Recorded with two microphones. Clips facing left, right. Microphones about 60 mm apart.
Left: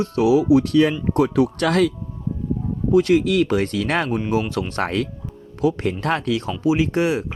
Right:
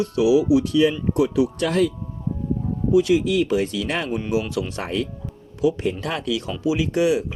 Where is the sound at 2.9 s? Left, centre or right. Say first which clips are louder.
Left 2 dB; left.